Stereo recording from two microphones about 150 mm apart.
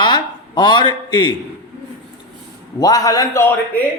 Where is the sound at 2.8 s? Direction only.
25° left (ahead or behind).